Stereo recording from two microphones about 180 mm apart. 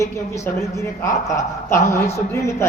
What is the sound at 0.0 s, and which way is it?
Speech, 15° left (ahead or behind).